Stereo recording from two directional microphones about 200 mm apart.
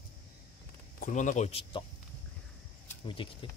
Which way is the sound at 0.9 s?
40° left (ahead or behind).